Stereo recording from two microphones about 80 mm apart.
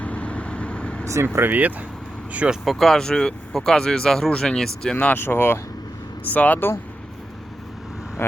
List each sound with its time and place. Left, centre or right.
0.0 s vehicle: centre
1.0 s speech: right; by 2.6 s centre
2.6 s speech: centre
4.9 s speech: left
8.2 s speech: left